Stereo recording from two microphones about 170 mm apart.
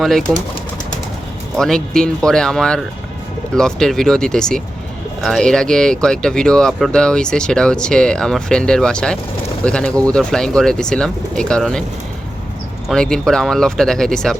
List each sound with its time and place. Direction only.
0.0 s speech: centre (ahead or behind)
1.5 s speech: 5° left (ahead or behind)
12.9 s speech: 5° left (ahead or behind)